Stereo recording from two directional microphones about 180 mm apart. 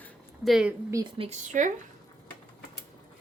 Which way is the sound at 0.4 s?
Centre (ahead or behind).